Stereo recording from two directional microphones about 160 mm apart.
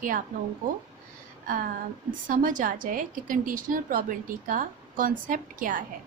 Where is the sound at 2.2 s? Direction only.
55° right (ahead or behind).